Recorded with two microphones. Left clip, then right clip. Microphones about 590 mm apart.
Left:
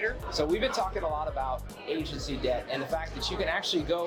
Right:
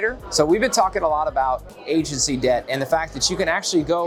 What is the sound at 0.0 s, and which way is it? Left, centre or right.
Speech, right.